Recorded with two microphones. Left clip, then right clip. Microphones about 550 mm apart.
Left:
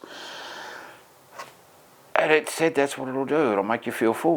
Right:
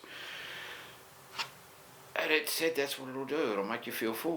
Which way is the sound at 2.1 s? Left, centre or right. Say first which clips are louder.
Left 10 dB; left.